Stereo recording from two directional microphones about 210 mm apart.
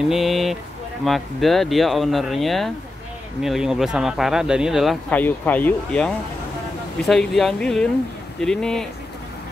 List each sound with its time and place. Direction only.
0.1 s speech: centre (ahead or behind)